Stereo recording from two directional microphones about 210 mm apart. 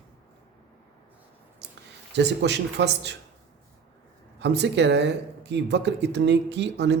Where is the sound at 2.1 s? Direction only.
55° right (ahead or behind).